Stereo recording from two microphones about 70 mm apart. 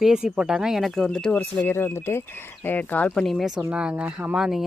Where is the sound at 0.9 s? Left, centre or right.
Centre.